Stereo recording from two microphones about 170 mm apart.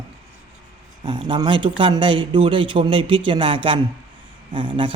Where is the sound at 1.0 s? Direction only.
25° right (ahead or behind).